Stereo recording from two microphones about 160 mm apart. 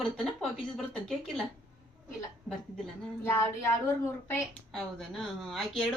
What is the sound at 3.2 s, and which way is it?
Speech, 15° left (ahead or behind).